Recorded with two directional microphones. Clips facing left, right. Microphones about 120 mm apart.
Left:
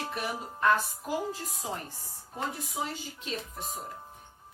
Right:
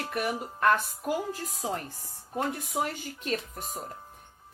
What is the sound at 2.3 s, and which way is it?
Speech, 60° right (ahead or behind).